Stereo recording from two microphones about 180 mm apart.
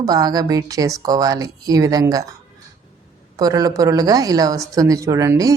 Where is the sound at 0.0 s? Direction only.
20° right (ahead or behind).